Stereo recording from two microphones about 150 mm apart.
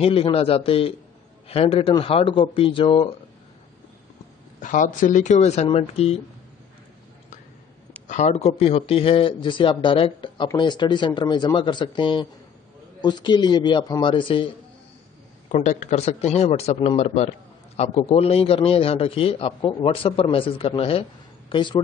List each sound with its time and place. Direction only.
0.0 s a man's voice: 40° left (ahead or behind)
4.6 s a man's voice: 60° left (ahead or behind); by 6.1 s 40° left (ahead or behind)
8.1 s a man's voice: 50° left (ahead or behind)
15.4 s a man's voice: 50° left (ahead or behind); by 21.8 s 30° left (ahead or behind)